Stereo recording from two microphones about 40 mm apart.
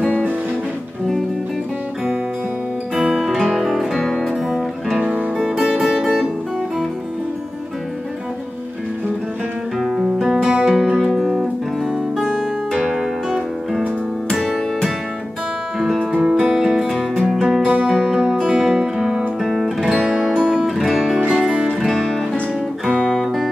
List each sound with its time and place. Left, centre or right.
3.0 s music: centre
5.0 s music: right
9.8 s music: right
10.6 s music: centre
14.3 s music: centre
16.8 s music: centre
17.8 s music: centre
18.6 s guitar: centre
19.4 s music: centre
19.9 s music: right
20.2 s guitar: centre
20.6 s music: centre
21.3 s music: centre
21.6 s music: centre